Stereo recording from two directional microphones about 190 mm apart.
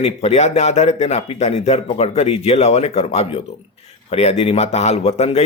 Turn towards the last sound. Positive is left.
turn(degrees=35)  # may be behind; listen again after turning